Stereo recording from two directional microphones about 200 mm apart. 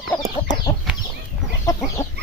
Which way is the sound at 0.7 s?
15° left (ahead or behind).